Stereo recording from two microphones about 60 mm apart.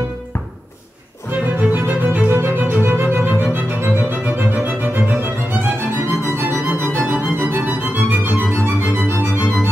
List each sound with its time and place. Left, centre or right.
1.6 s music: right